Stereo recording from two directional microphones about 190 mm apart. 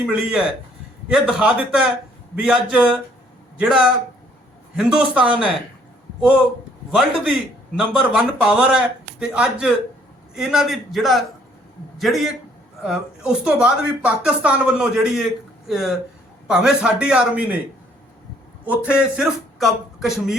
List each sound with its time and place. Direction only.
0.0 s speech: 5° right (ahead or behind)
7.8 s speech: 5° right (ahead or behind)
18.6 s speech: 10° right (ahead or behind)